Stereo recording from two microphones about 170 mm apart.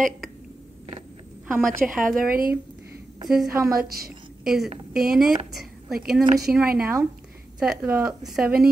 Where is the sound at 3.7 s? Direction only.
60° right (ahead or behind).